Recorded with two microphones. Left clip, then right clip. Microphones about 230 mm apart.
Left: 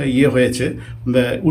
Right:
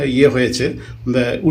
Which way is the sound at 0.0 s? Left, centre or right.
Centre.